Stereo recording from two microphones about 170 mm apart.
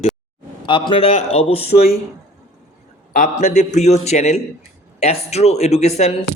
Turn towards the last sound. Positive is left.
turn(degrees=40)  # may be behind; listen again after turning